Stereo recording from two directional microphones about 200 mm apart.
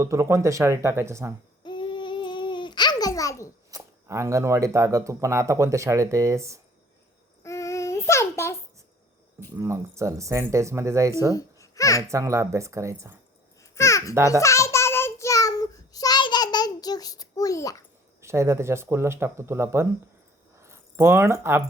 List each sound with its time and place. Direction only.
0.0 s speech: 15° right (ahead or behind)
1.6 s babbling: 25° left (ahead or behind)
3.7 s speech: 15° right (ahead or behind)
7.4 s child singing: 15° left (ahead or behind)
9.6 s speech: 15° right (ahead or behind)
11.3 s babbling: 15° left (ahead or behind)
12.0 s speech: 15° right (ahead or behind)
13.6 s babbling: 15° left (ahead or behind)
14.3 s child singing: 15° left (ahead or behind)
18.2 s speech: 15° right (ahead or behind)
20.6 s a sound: 15° right (ahead or behind)